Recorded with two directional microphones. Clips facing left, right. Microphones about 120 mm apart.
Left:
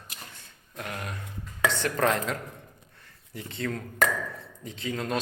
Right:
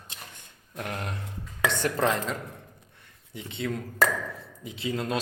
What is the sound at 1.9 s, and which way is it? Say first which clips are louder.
A woman's voice: even; centre (ahead or behind).